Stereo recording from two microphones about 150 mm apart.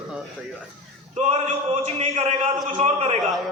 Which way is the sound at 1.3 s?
45° right (ahead or behind).